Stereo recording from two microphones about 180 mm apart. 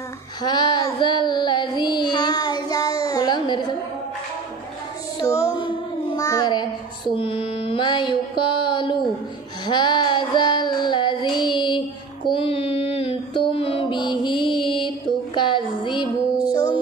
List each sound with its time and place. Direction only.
0.4 s child singing: 25° left (ahead or behind)
5.2 s child singing: 15° left (ahead or behind)
7.2 s mantra: 30° left (ahead or behind)
9.7 s child singing: 25° left (ahead or behind)